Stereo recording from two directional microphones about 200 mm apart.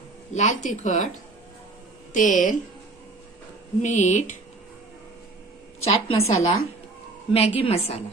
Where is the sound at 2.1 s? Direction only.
40° left (ahead or behind).